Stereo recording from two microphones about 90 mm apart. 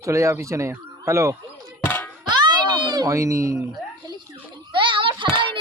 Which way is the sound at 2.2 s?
55° right (ahead or behind).